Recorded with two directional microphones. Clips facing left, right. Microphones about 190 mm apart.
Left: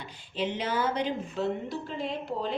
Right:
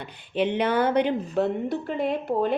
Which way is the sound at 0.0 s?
60° right (ahead or behind).